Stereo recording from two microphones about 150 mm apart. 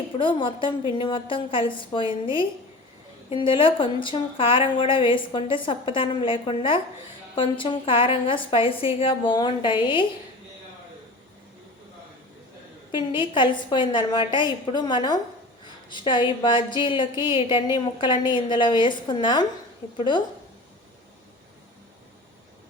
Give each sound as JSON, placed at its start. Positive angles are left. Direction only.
{"t": 0.2, "sound": "a woman's voice", "side_deg": 35}
{"t": 13.1, "sound": "a woman's voice", "side_deg": 30}